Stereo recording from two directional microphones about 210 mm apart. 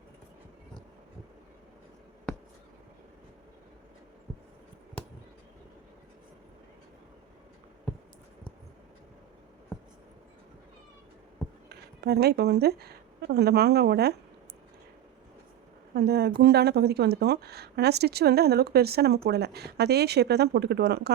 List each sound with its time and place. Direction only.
11.7 s speech: 50° right (ahead or behind)
16.0 s speech: 50° right (ahead or behind)